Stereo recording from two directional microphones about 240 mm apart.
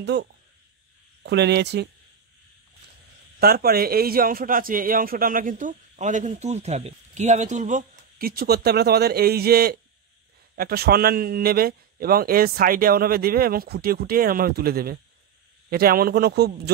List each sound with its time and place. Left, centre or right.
0.0 s speech: right
3.3 s a man's voice: right